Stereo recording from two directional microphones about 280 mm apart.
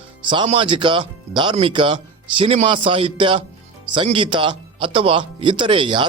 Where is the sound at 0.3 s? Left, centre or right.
Centre.